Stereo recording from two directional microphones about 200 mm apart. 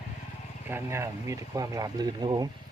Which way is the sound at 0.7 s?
10° right (ahead or behind).